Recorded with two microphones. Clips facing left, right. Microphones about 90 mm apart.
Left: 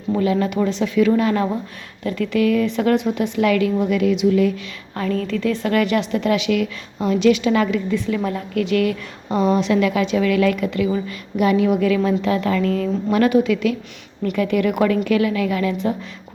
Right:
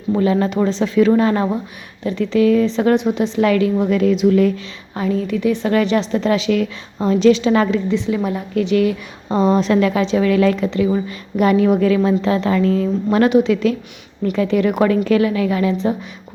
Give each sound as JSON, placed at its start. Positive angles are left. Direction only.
{"t": 0.2, "sound": "a woman's voice", "side_deg": -35}
{"t": 4.9, "sound": "a woman's voice", "side_deg": -20}
{"t": 11.3, "sound": "a woman's voice", "side_deg": -40}